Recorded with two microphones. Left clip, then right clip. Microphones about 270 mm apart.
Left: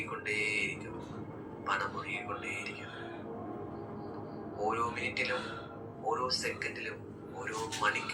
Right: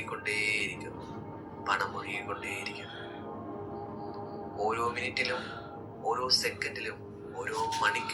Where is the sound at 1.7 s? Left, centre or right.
Right.